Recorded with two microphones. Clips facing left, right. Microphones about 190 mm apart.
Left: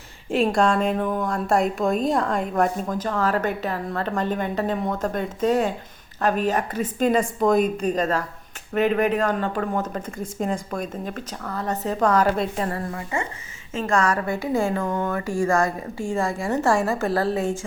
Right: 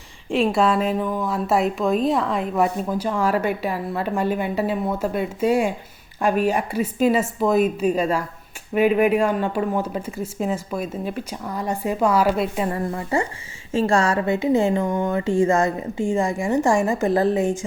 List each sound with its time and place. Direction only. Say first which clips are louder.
0.3 s a woman's voice: right 1 dB; centre (ahead or behind)
12.7 s a woman's voice: right 5 dB; 30° right (ahead or behind)